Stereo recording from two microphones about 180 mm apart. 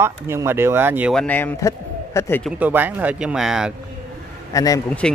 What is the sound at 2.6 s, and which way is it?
Speech, 10° right (ahead or behind).